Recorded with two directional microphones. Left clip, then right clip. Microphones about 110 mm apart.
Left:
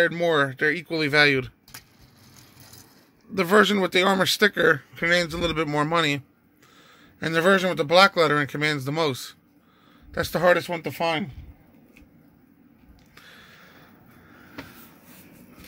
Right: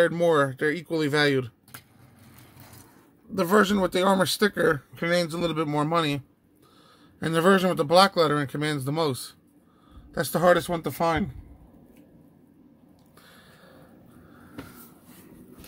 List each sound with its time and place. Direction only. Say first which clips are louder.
0.0 s speech: even; 15° right (ahead or behind)
3.3 s speech: left 3 dB; centre (ahead or behind)
7.2 s a man's voice: left 1 dB; 15° right (ahead or behind)
8.0 s a man's voice: left 5 dB; 5° right (ahead or behind)
13.1 s a sound: left 6 dB; 10° right (ahead or behind)